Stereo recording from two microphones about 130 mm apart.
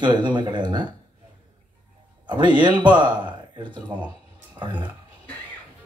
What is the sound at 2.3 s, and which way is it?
Speech, 35° right (ahead or behind).